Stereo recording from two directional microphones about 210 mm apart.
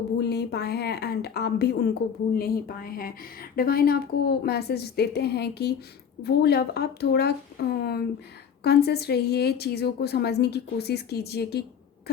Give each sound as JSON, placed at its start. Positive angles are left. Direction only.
{"t": 0.2, "sound": "a woman's voice", "side_deg": 50}